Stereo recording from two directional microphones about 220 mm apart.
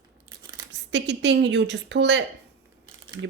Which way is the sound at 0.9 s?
55° right (ahead or behind).